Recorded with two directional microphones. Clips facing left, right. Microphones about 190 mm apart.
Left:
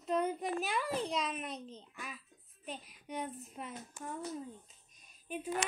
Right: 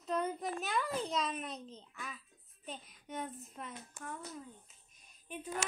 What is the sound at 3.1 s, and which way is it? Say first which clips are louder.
Speech: left 2 dB; 15° left (ahead or behind).